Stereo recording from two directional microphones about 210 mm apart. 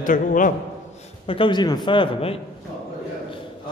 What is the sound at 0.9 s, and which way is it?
A man's voice, 25° left (ahead or behind).